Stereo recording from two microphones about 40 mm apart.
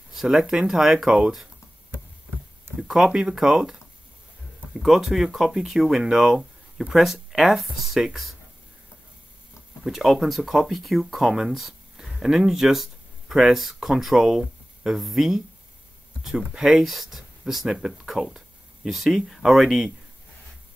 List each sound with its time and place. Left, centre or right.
0.1 s a sound: centre
0.4 s speech: centre
2.9 s speech: centre
4.8 s speech: centre
6.9 s speech: centre
9.8 s speech: centre